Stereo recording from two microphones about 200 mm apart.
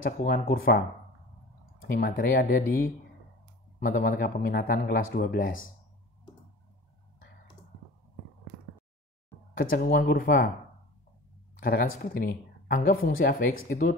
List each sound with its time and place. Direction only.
0.0 s speech: 45° left (ahead or behind)
9.5 s speech: 45° left (ahead or behind)
11.6 s speech: 45° left (ahead or behind)